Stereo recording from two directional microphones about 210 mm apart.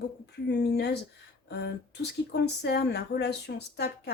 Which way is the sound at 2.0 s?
50° left (ahead or behind).